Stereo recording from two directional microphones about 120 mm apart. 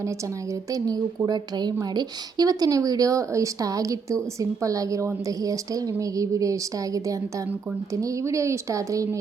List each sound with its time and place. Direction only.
0.7 s a woman's voice: 30° right (ahead or behind)